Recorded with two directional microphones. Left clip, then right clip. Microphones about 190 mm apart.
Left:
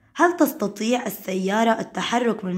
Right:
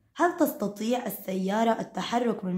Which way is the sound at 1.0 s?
15° left (ahead or behind).